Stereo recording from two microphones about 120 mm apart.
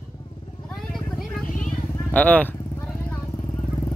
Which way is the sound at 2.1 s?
10° left (ahead or behind).